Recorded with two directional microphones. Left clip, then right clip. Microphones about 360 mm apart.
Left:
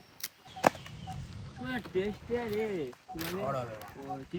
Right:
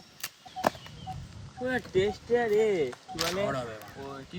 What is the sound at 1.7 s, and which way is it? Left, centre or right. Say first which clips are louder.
Speech: right 7 dB; right.